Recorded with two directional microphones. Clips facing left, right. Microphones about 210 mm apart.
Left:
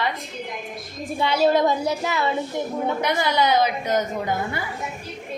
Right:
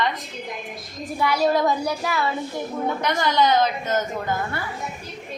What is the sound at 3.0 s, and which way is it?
A woman's voice, 10° left (ahead or behind).